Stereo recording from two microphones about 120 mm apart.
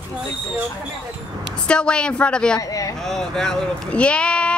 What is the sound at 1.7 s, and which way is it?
Speech, 10° left (ahead or behind).